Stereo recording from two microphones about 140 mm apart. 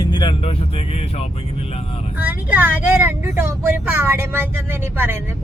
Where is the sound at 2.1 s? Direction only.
15° right (ahead or behind).